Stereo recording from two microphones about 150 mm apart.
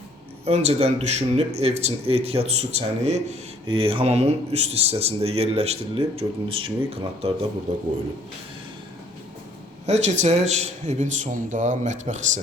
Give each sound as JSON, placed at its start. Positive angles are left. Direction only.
{"t": 0.4, "sound": "speech", "side_deg": -45}
{"t": 9.8, "sound": "speech", "side_deg": -50}